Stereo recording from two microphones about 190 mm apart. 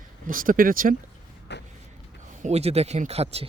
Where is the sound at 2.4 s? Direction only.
35° right (ahead or behind).